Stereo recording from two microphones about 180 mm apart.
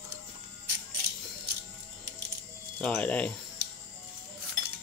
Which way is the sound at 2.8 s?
10° left (ahead or behind).